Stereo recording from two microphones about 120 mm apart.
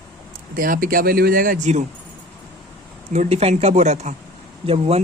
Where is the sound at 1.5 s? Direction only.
85° right.